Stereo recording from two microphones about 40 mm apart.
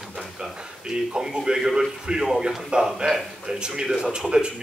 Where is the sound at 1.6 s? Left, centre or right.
Centre.